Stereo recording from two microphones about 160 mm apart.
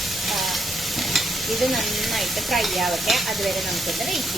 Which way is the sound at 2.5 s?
Centre (ahead or behind).